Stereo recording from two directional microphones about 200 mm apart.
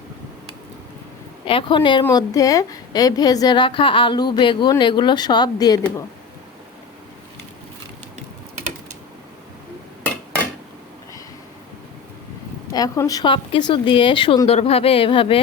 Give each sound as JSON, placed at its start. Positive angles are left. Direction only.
{"t": 1.5, "sound": "a woman's voice", "side_deg": 25}
{"t": 12.7, "sound": "a woman's voice", "side_deg": 20}